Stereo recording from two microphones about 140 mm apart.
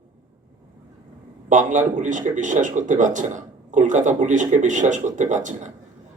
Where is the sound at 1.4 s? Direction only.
60° right (ahead or behind).